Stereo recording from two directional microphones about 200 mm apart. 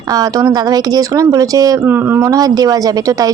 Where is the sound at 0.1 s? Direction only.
20° right (ahead or behind).